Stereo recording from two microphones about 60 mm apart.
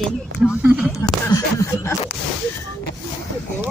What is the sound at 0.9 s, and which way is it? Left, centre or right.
Speech, left.